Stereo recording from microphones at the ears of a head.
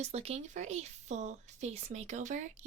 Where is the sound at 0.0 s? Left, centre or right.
Right.